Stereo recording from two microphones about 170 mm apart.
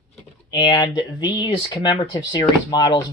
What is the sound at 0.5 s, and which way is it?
Speech, 25° left (ahead or behind).